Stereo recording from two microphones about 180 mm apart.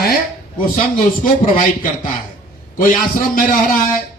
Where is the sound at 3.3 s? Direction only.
50° left (ahead or behind).